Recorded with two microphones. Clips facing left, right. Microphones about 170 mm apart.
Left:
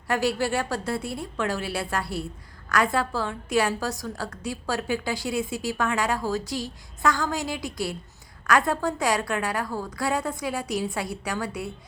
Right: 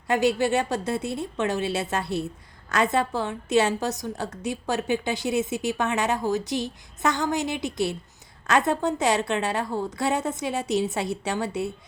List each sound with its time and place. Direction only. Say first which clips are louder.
0.1 s a woman's voice: right 3 dB; 20° right (ahead or behind)